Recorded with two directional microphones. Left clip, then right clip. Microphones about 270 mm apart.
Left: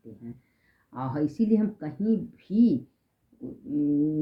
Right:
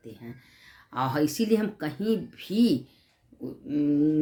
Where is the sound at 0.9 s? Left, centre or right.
Centre.